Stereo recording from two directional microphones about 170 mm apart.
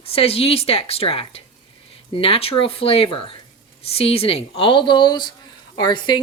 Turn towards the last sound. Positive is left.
turn(degrees=25)  # may be behind; listen again after turning